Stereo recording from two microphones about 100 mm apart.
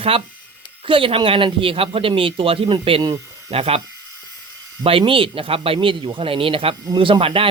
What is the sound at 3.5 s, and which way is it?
Speech, 75° right (ahead or behind).